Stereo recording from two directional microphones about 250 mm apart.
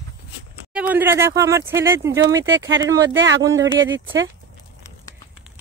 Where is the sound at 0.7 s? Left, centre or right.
Centre.